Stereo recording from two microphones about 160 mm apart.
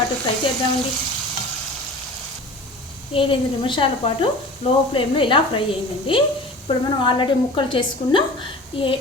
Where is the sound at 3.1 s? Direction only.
35° left (ahead or behind).